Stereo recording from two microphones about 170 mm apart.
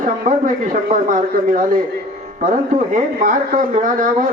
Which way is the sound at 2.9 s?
50° right (ahead or behind).